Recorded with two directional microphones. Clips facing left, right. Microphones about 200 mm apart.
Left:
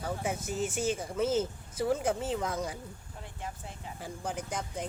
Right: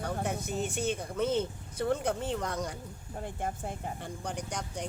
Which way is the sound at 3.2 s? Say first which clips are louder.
Right 7 dB; 50° right (ahead or behind).